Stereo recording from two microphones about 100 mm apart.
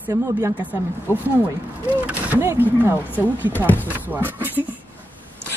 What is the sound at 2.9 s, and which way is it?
Speech, 20° left (ahead or behind).